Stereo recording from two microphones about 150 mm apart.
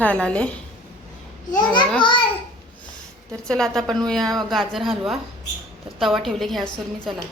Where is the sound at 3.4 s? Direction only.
5° left (ahead or behind).